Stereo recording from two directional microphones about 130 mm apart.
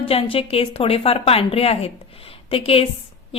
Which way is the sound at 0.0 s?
45° left (ahead or behind).